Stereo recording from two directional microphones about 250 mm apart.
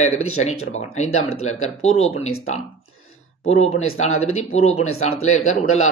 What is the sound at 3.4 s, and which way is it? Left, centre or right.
Speech, left.